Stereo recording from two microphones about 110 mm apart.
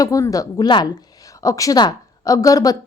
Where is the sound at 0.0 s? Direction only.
30° left (ahead or behind).